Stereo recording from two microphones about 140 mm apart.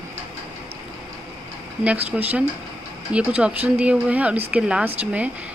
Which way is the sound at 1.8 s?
10° right (ahead or behind).